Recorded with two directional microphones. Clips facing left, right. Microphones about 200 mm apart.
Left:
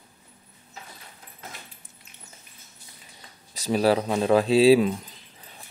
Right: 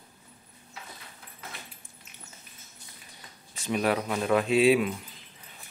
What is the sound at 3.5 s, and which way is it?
Speech, 35° left (ahead or behind).